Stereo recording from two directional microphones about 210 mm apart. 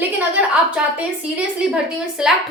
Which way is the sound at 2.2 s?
Centre (ahead or behind).